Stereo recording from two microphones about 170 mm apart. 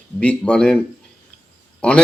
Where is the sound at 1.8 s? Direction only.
5° left (ahead or behind).